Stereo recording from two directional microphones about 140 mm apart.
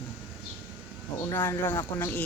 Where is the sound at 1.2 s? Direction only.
20° left (ahead or behind).